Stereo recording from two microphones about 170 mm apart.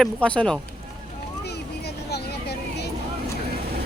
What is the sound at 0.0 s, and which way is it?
Speech, 5° left (ahead or behind).